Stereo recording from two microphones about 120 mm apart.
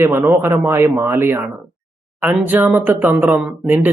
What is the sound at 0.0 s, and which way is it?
Speech, 20° right (ahead or behind).